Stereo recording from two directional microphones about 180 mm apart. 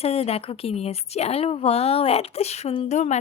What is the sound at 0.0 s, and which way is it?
Speech, 35° left (ahead or behind).